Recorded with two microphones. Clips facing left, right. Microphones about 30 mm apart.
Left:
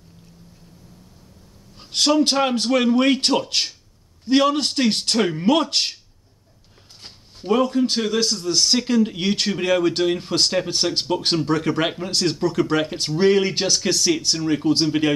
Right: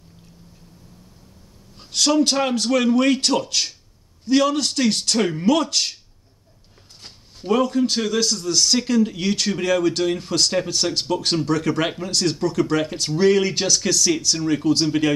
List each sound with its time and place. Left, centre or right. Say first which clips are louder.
1.9 s a man's voice: left 1 dB; left
2.2 s speech: left 1 dB; centre
2.5 s a man's voice: even; left
7.0 s a man's voice: even; centre
9.1 s a man's voice: even; left
12.8 s speech: even; left
13.8 s a man's voice: even; left